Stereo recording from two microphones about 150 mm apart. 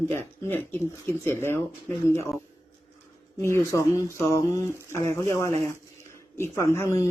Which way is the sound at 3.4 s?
20° left (ahead or behind).